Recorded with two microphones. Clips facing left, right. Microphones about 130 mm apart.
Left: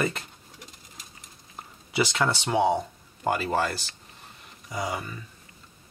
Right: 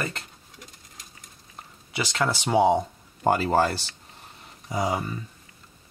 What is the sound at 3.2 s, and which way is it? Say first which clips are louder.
Speech: right 4 dB; 35° right (ahead or behind).